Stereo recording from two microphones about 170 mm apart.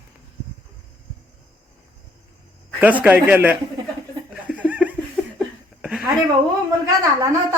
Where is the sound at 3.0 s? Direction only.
10° right (ahead or behind).